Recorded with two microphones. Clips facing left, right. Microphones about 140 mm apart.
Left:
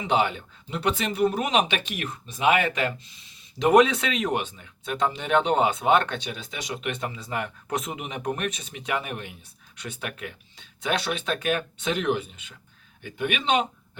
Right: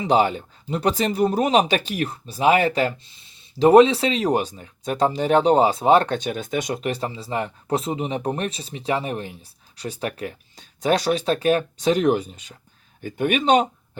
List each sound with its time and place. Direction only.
0.0 s speech: 35° right (ahead or behind)